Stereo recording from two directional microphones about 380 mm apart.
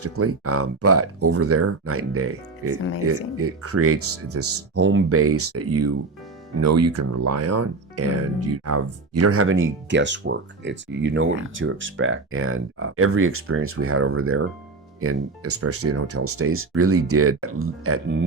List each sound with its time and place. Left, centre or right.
0.0 s speech: right